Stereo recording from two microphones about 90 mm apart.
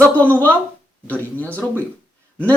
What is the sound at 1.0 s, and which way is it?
Speech, 15° left (ahead or behind).